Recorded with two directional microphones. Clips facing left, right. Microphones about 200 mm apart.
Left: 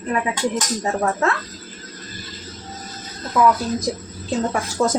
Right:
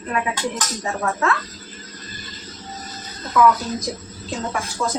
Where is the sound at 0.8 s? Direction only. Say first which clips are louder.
Left 1 dB; 35° left (ahead or behind).